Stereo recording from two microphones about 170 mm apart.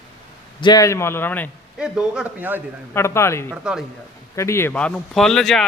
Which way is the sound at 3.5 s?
5° right (ahead or behind).